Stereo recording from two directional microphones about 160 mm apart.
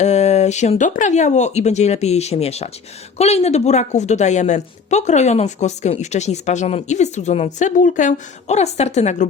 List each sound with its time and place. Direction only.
0.0 s a woman's voice: 45° left (ahead or behind)